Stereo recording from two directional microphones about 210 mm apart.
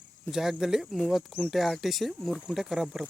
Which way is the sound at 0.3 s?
Centre (ahead or behind).